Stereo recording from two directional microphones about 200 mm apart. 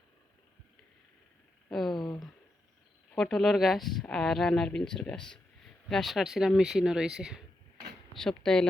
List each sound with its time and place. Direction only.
1.7 s speech: centre (ahead or behind)
2.0 s a sound: 20° left (ahead or behind)
3.2 s speech: centre (ahead or behind)